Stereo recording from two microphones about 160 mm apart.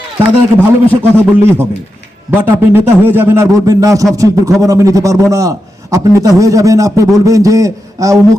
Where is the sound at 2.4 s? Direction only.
15° right (ahead or behind).